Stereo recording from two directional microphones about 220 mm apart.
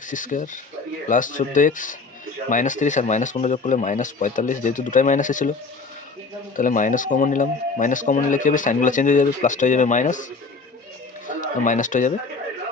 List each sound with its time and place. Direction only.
0.1 s speech: 35° left (ahead or behind)
6.6 s speech: 35° left (ahead or behind)
11.3 s speech: 35° left (ahead or behind)